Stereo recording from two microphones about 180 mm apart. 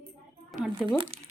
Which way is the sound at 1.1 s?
35° right (ahead or behind).